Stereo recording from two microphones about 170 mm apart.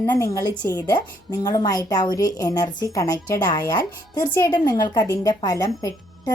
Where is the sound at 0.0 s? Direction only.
20° left (ahead or behind).